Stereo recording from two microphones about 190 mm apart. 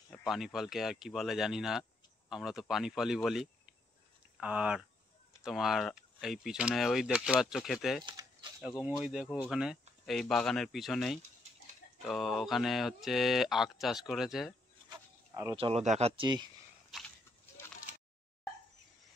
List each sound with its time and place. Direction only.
0.1 s speech: centre (ahead or behind)
8.0 s speech: 25° right (ahead or behind)
8.6 s speech: 5° right (ahead or behind)
14.9 s insect: 15° right (ahead or behind)
15.5 s speech: 30° right (ahead or behind)